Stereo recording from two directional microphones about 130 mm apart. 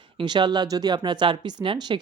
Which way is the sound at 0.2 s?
35° right (ahead or behind).